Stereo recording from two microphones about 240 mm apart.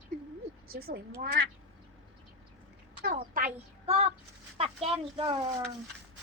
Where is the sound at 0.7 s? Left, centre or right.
Right.